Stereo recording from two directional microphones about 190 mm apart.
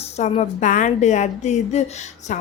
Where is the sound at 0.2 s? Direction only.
40° left (ahead or behind).